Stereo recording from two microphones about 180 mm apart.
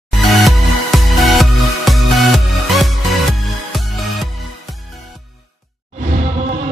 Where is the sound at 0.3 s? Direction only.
Centre (ahead or behind).